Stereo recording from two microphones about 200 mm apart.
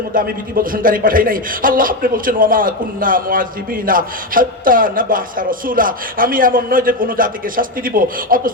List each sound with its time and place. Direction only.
0.1 s a man's voice: 45° right (ahead or behind)